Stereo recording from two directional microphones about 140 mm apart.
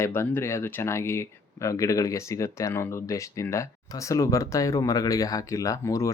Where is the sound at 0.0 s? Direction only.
20° left (ahead or behind).